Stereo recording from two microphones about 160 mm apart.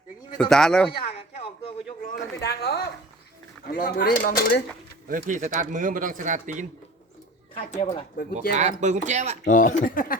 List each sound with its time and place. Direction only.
0.3 s speech: 5° left (ahead or behind)
1.4 s a sound: 35° left (ahead or behind)
2.0 s speech: 80° left
3.7 s speech: 65° left (ahead or behind)
5.0 s speech: 55° right (ahead or behind)
7.7 s speech: 45° left (ahead or behind)
8.3 s speech: 45° right (ahead or behind)
9.5 s speech: 50° left (ahead or behind)